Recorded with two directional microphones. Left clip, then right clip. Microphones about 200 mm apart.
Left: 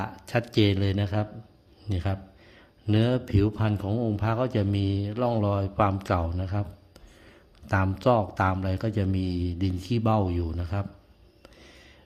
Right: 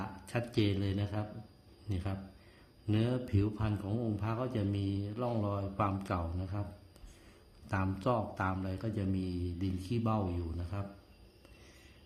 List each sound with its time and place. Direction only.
0.0 s a man's voice: 35° left (ahead or behind)
7.7 s a man's voice: 35° left (ahead or behind)